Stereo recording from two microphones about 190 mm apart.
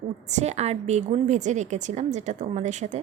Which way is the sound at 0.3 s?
35° right (ahead or behind).